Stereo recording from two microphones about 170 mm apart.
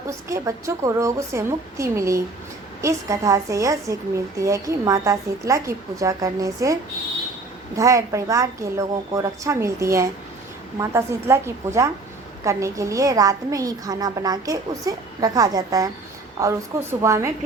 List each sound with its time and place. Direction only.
0.1 s a woman's voice: 15° right (ahead or behind)
7.8 s a woman's voice: 20° right (ahead or behind)